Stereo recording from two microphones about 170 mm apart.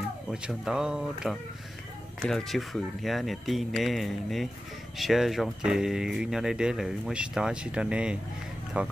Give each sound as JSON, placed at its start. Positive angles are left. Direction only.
{"t": 0.3, "sound": "speech", "side_deg": -5}